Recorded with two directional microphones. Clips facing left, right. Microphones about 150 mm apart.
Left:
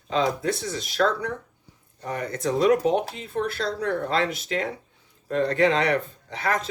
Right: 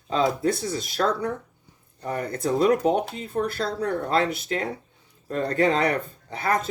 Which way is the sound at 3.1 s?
45° right (ahead or behind).